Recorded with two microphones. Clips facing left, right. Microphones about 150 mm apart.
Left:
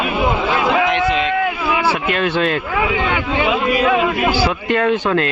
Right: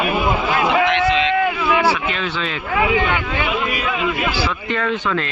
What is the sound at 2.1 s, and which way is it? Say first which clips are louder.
Speech: left 7 dB; 55° left (ahead or behind).